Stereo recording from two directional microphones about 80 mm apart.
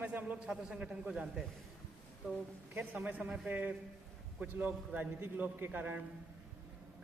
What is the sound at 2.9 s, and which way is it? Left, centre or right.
A man's voice, centre.